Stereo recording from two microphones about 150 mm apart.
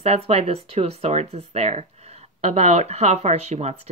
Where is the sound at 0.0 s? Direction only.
45° right (ahead or behind).